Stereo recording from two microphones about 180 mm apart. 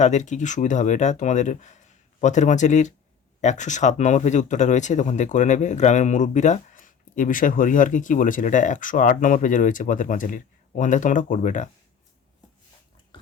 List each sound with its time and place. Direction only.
0.0 s speech: 40° left (ahead or behind)